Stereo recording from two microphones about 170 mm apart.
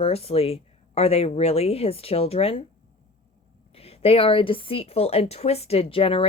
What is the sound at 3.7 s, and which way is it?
A woman's voice, 35° left (ahead or behind).